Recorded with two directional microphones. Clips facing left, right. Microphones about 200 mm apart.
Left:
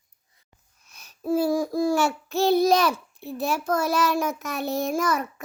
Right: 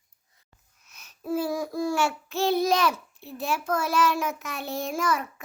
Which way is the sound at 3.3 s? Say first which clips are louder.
Left 3 dB; 40° left (ahead or behind).